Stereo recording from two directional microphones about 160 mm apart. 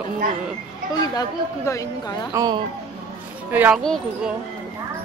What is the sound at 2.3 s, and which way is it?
Speech, 20° right (ahead or behind).